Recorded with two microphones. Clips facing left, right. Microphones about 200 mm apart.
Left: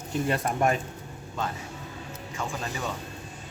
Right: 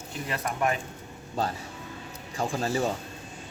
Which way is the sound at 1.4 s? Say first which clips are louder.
Right 3 dB; 35° right (ahead or behind).